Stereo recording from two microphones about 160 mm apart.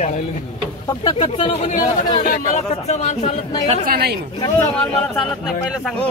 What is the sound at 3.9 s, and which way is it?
Speech, 75° right (ahead or behind).